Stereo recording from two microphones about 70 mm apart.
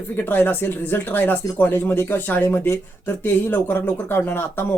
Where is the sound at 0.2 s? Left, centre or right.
Left.